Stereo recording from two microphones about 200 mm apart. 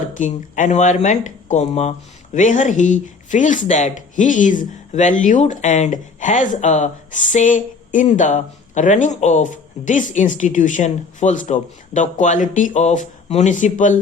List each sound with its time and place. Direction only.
0.2 s speech: 40° left (ahead or behind)